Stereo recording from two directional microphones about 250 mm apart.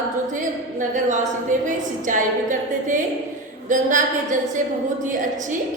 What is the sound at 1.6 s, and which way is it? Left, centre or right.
A woman's voice, right.